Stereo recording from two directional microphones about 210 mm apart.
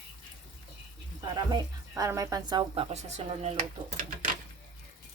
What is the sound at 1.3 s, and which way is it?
Speech, 20° right (ahead or behind).